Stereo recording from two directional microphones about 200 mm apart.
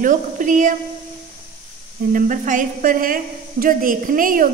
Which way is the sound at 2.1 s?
40° right (ahead or behind).